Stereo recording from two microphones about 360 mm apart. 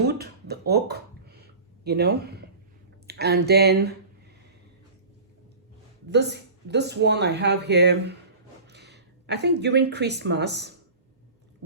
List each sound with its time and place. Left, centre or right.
0.1 s a sound: right
3.1 s speech: right
6.1 s speech: right